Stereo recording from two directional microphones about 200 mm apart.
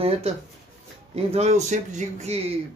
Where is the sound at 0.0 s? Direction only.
30° right (ahead or behind).